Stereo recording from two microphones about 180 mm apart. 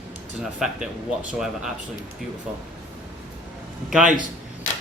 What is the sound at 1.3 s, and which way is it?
Speech, 5° right (ahead or behind).